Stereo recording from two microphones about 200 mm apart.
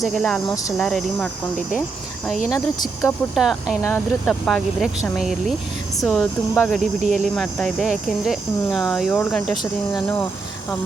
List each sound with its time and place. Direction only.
0.0 s speech: centre (ahead or behind)
3.0 s speech: centre (ahead or behind)
3.8 s speech: 10° left (ahead or behind)
7.0 s speech: 35° right (ahead or behind)
7.3 s speech: centre (ahead or behind)